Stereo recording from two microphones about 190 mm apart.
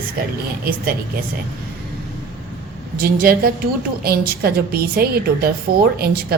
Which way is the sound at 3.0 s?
50° right (ahead or behind).